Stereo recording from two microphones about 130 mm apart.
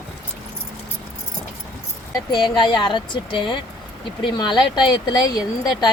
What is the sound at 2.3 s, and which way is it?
Speech, 35° left (ahead or behind).